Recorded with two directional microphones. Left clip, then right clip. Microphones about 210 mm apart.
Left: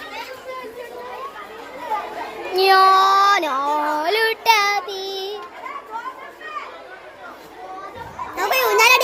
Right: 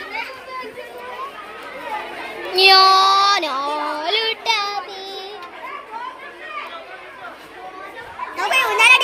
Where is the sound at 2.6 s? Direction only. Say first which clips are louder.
Right 2 dB; 5° left (ahead or behind); by 5.4 s 30° left (ahead or behind).